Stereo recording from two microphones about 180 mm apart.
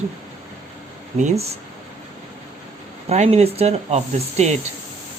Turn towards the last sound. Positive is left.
turn(degrees=-40)  # may be behind; listen again after turning